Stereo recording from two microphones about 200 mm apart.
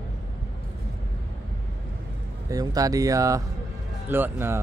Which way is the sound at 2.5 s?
20° right (ahead or behind).